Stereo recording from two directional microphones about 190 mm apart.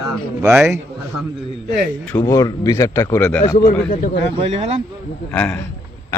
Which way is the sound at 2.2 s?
20° left (ahead or behind).